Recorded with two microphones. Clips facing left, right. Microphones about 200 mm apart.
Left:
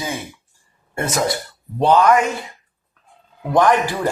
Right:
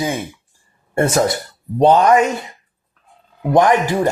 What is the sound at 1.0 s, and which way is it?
Speech, 30° right (ahead or behind).